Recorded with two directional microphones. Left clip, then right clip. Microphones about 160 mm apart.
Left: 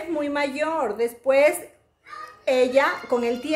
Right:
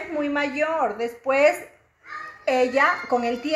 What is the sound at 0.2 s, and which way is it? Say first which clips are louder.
A woman's voice: right 2 dB; 40° left (ahead or behind).